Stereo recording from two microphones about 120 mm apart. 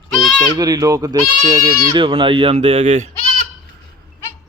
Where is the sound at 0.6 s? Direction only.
30° right (ahead or behind); by 2.9 s 50° right (ahead or behind).